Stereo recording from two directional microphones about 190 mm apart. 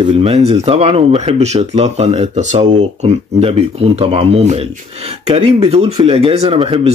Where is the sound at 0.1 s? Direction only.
35° right (ahead or behind).